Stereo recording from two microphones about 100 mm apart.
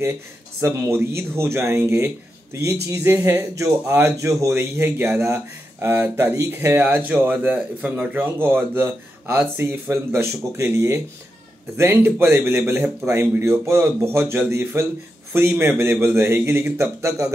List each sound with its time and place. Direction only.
0.6 s speech: 25° right (ahead or behind)